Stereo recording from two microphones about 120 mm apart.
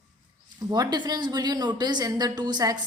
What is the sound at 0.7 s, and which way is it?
A woman's voice, 35° right (ahead or behind).